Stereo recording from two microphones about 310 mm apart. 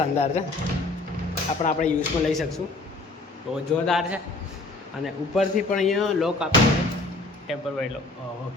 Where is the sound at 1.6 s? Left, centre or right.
Left.